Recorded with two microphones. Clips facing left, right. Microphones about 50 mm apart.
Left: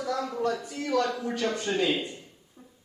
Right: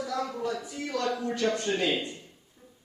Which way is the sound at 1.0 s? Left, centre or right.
Centre.